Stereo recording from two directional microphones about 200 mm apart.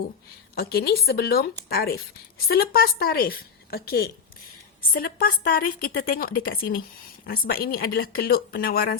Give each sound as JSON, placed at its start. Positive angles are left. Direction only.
{"t": 0.5, "sound": "a woman's voice", "side_deg": 50}